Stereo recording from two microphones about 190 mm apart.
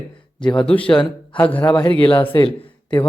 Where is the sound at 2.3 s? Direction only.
25° left (ahead or behind).